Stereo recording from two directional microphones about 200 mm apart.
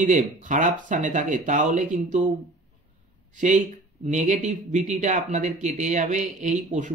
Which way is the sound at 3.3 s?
40° right (ahead or behind).